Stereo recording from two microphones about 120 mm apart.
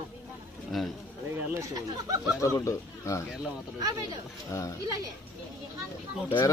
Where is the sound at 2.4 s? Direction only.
25° left (ahead or behind).